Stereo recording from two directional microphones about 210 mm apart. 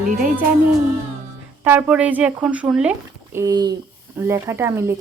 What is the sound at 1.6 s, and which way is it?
A woman's voice, 10° right (ahead or behind).